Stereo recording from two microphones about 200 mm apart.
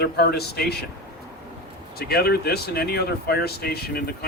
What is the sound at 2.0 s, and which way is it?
Speech, 50° left (ahead or behind).